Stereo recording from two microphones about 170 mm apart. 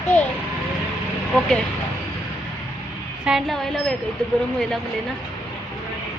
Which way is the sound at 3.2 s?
Centre (ahead or behind).